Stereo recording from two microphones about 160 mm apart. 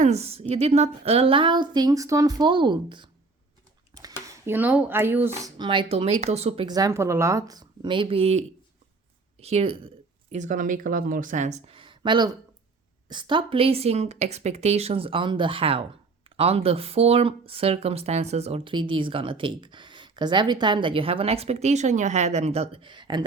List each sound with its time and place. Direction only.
0.0 s speech: 40° right (ahead or behind); by 5.5 s 15° right (ahead or behind)
5.5 s speech: 30° right (ahead or behind)
6.7 s a woman's voice: 20° right (ahead or behind); by 9.9 s 40° right (ahead or behind)
10.3 s speech: 50° right (ahead or behind); by 23.2 s 30° right (ahead or behind)